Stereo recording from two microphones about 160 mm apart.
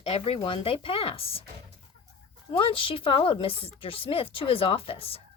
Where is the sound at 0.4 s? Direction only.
35° left (ahead or behind).